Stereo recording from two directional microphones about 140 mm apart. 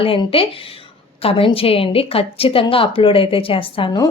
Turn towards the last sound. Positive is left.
turn(degrees=40)  # may be behind; listen again after turning